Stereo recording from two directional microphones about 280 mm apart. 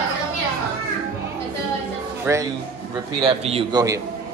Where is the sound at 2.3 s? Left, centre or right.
Centre.